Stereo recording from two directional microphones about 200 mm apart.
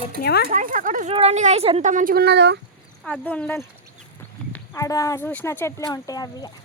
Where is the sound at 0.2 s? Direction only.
50° left (ahead or behind).